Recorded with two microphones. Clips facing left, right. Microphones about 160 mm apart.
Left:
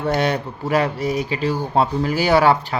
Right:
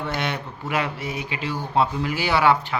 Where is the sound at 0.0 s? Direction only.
40° left (ahead or behind).